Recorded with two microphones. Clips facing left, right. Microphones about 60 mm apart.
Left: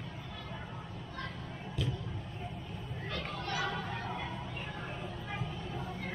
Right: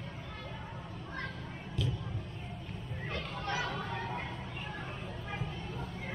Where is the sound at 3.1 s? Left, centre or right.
Right.